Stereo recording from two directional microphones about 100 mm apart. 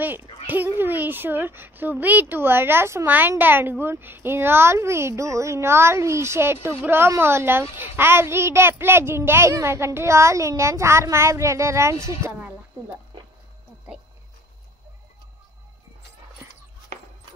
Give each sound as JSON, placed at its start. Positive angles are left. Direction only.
{"t": 0.0, "sound": "a child's voice", "side_deg": -20}
{"t": 12.3, "sound": "speech", "side_deg": -15}